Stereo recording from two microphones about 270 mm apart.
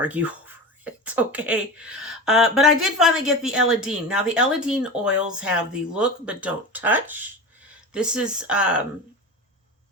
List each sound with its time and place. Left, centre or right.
0.0 s speech: centre